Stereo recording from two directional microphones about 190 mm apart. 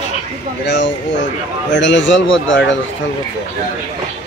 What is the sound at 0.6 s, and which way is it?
Speech, 65° left (ahead or behind).